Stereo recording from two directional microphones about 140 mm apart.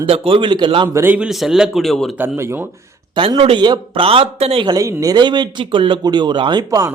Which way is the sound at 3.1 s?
35° right (ahead or behind).